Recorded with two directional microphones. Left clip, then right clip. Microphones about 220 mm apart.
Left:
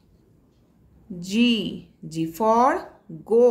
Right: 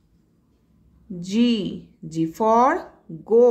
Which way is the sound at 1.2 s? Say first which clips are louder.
Even; 15° right (ahead or behind).